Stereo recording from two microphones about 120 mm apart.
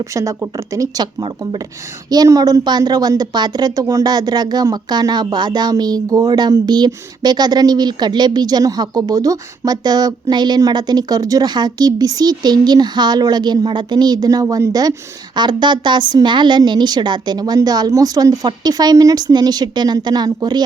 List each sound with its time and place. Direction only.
0.0 s speech: 25° right (ahead or behind)
2.0 s a woman's voice: 30° right (ahead or behind)